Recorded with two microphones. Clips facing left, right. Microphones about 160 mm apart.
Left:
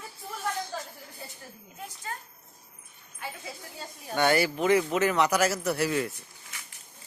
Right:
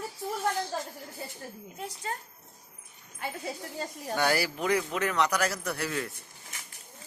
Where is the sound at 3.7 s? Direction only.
45° right (ahead or behind).